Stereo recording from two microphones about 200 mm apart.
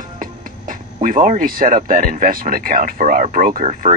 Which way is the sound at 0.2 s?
40° right (ahead or behind).